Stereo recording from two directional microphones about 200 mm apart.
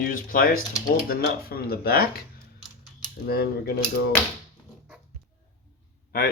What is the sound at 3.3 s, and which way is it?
Speech, 50° left (ahead or behind).